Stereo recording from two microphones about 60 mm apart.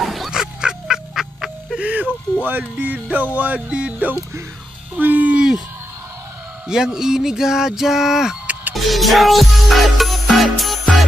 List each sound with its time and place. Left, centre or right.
0.0 s duck: centre
0.3 s music: centre
1.8 s a sound: right
2.4 s music: right
6.7 s a sound: centre
8.7 s music: centre